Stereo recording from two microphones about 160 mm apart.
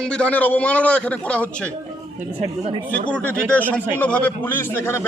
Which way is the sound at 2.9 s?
10° left (ahead or behind).